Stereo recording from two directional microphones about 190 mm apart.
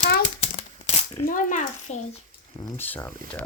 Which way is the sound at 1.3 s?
45° left (ahead or behind).